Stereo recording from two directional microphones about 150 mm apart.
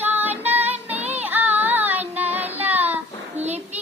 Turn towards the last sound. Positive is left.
turn(degrees=-45)  # may be behind; listen again after turning